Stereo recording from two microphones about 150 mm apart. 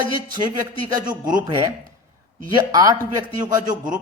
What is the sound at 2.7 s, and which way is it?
Speech, 25° right (ahead or behind).